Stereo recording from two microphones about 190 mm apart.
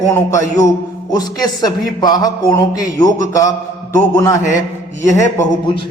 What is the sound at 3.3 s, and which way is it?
Speech, 20° left (ahead or behind).